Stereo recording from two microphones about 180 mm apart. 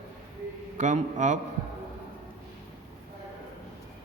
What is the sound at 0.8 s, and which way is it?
Speech, 40° right (ahead or behind).